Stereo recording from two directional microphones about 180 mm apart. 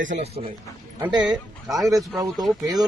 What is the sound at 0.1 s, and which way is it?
Speech, 35° right (ahead or behind).